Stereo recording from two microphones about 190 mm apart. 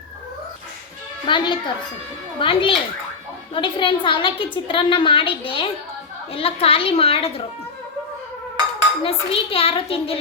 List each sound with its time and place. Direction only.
1.3 s a woman's voice: 25° left (ahead or behind)
9.0 s a woman's voice: 30° left (ahead or behind)